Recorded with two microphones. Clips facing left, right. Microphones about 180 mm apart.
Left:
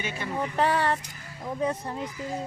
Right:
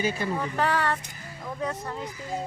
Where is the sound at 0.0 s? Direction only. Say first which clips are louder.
Right 6 dB; 35° right (ahead or behind).